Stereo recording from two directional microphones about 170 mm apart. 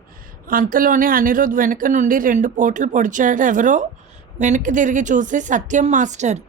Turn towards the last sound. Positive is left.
turn(degrees=-45)  # may be behind; listen again after turning